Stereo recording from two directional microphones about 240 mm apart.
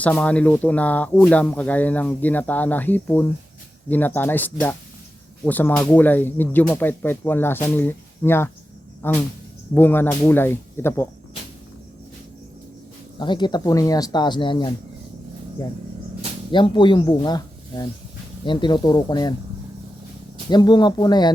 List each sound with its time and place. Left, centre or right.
0.0 s speech: centre
13.1 s speech: centre
16.5 s speech: centre
20.5 s speech: centre